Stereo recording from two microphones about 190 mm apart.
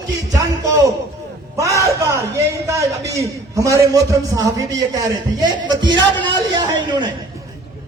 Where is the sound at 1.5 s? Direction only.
15° right (ahead or behind).